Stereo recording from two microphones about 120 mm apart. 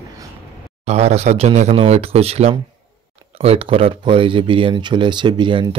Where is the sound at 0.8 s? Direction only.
65° right (ahead or behind).